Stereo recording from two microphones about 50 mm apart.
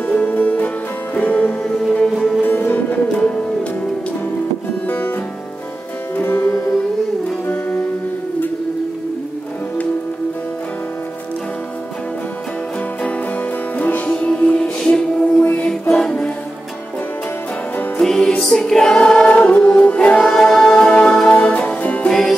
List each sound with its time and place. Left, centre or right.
0.0 s music: left
2.4 s music: left
4.8 s music: left
6.1 s music: left
13.7 s music: left
14.1 s music: left
18.0 s music: centre; by 22.1 s left